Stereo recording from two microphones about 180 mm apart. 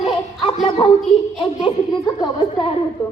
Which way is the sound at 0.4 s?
30° left (ahead or behind).